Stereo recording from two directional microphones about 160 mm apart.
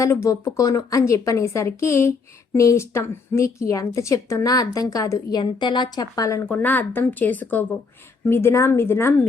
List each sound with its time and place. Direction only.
0.0 s a woman's voice: 20° left (ahead or behind)